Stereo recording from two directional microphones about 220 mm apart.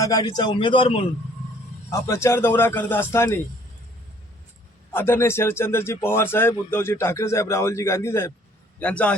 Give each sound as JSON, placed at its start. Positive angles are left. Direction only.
{"t": 0.0, "sound": "a man's voice", "side_deg": 15}
{"t": 4.9, "sound": "speech", "side_deg": 10}